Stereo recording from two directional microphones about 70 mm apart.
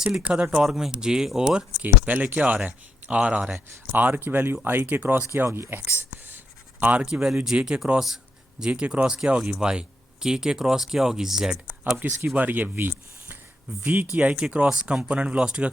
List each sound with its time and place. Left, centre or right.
0.0 s speech: centre
1.8 s speech: right
5.8 s writing: right
7.1 s speech: centre
11.9 s speech: right